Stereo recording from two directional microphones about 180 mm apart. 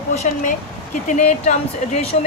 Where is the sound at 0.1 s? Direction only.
35° left (ahead or behind).